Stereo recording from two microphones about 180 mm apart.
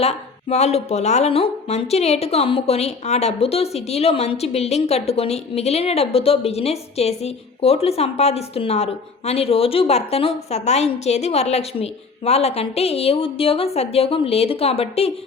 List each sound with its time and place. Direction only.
0.0 s speech: 35° left (ahead or behind)